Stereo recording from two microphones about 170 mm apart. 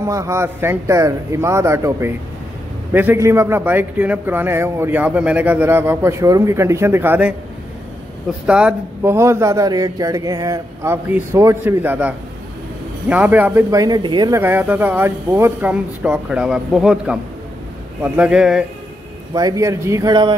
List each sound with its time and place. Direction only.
0.0 s a man's voice: 20° right (ahead or behind)
8.5 s a man's voice: 5° right (ahead or behind); by 14.4 s 25° right (ahead or behind)
14.4 s a man's voice: 10° right (ahead or behind)
19.3 s speech: 20° right (ahead or behind)